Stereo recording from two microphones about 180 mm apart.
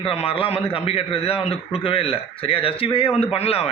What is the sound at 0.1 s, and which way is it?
Speech, 35° left (ahead or behind).